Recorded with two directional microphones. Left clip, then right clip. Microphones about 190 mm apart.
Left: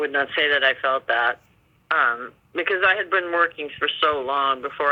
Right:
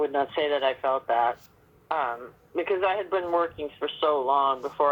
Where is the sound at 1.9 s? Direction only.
65° left (ahead or behind).